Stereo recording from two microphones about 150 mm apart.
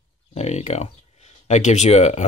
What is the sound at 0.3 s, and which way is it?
Speech, 45° left (ahead or behind).